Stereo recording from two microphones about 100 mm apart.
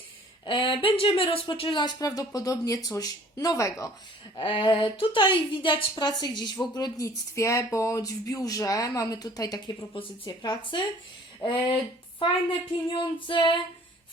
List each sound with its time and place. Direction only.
0.4 s speech: 60° left (ahead or behind); by 3.9 s 35° left (ahead or behind)
4.4 s speech: 55° left (ahead or behind)
5.9 s speech: 45° left (ahead or behind)
9.9 s speech: 55° left (ahead or behind)
12.9 s speech: 55° left (ahead or behind)